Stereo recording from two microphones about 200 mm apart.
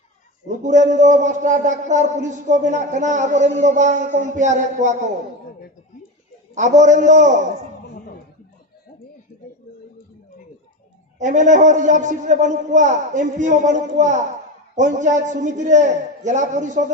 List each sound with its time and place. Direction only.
0.4 s speech: 35° right (ahead or behind)
6.7 s speech: 40° right (ahead or behind)
11.2 s speech: 40° right (ahead or behind)